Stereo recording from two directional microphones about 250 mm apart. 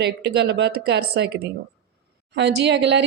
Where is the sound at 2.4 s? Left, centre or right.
Right.